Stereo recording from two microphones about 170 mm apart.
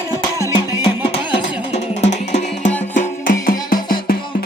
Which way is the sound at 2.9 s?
50° left (ahead or behind).